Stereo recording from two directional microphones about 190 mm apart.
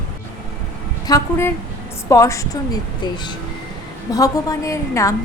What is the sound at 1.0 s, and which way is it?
A woman's voice, 15° left (ahead or behind).